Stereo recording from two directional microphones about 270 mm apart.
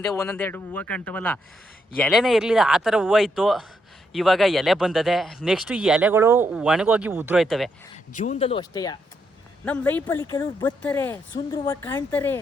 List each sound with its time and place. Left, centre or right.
0.1 s speech: centre
8.1 s speech: left; by 12.4 s centre